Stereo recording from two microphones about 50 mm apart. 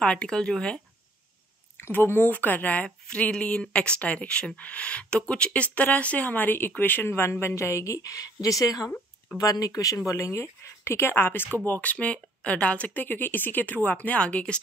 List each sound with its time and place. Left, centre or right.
0.0 s speech: centre
1.8 s speech: left
9.5 s speech: left
11.5 s speech: left